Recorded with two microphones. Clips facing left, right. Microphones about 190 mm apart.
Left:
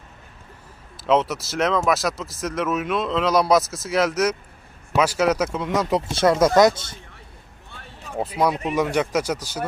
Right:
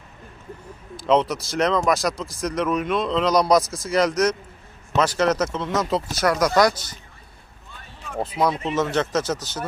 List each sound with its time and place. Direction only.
0.9 s speech: 5° left (ahead or behind)
6.1 s speech: 25° left (ahead or behind)
8.2 s speech: 10° left (ahead or behind)